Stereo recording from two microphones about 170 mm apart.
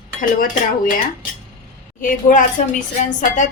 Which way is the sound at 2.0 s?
50° left (ahead or behind).